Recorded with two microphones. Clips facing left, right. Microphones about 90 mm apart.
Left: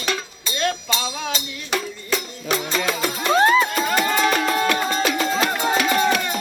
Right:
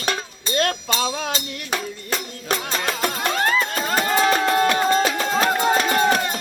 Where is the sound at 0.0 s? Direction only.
45° right (ahead or behind).